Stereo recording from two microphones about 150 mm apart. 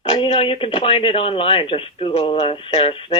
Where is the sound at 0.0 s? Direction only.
40° left (ahead or behind).